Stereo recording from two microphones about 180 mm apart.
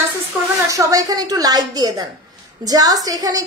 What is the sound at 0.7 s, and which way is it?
A woman's voice, 20° right (ahead or behind).